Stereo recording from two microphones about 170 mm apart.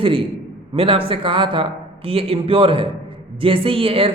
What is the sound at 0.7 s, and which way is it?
A man's voice, 35° right (ahead or behind).